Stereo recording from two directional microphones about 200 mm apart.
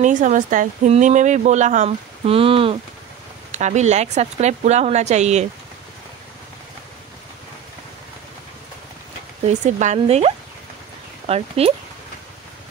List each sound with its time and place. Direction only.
0.0 s speech: 40° right (ahead or behind)
9.5 s speech: 35° right (ahead or behind)